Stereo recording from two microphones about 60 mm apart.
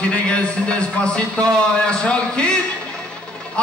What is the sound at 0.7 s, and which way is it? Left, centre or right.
A man's voice, centre.